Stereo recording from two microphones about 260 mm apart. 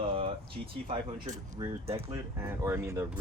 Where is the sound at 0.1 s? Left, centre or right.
Right.